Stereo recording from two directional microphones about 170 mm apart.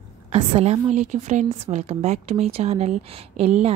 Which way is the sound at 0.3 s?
35° right (ahead or behind).